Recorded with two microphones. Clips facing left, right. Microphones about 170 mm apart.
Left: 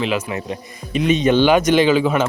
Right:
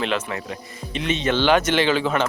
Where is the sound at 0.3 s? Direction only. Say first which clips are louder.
Left 4 dB; 20° left (ahead or behind).